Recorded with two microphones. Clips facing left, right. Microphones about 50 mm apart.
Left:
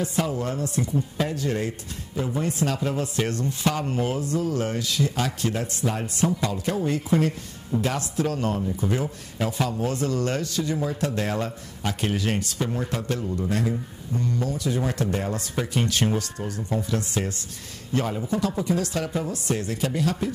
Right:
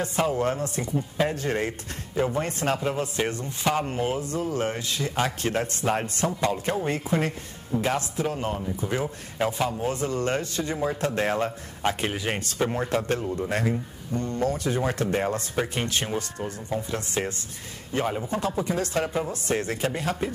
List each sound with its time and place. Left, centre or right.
0.0 s rub: right
2.8 s rub: right
7.8 s a man's voice: right
12.1 s speech: centre
12.5 s rub: right
15.5 s a man's voice: right
18.2 s rub: right
18.6 s a man's voice: right
19.3 s rub: right